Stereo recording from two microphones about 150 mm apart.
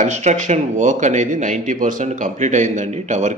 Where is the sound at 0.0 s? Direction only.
50° right (ahead or behind).